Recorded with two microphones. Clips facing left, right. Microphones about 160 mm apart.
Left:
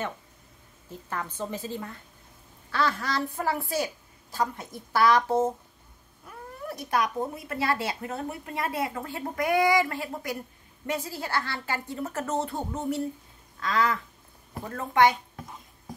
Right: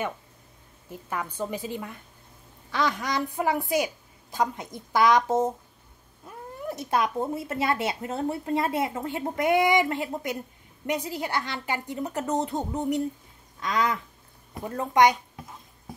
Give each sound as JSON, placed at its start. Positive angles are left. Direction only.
{"t": 0.8, "sound": "a woman's voice", "side_deg": -10}